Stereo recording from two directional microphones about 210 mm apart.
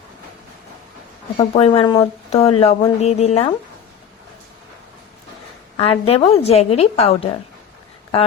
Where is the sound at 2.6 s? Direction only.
30° left (ahead or behind).